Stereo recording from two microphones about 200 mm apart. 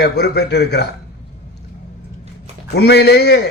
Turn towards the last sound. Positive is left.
turn(degrees=55)  # may be behind; listen again after turning